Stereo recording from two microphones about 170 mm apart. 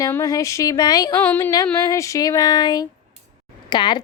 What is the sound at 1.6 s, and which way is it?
Child singing, 15° left (ahead or behind).